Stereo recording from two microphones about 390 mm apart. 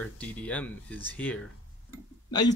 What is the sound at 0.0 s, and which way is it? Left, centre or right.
Speech, centre.